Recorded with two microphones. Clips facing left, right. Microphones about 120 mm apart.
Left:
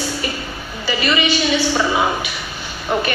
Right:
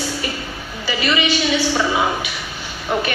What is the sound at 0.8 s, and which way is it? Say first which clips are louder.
Speech: left 1 dB; 45° left (ahead or behind).